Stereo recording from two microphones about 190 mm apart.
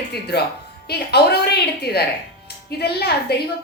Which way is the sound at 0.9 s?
60° left (ahead or behind).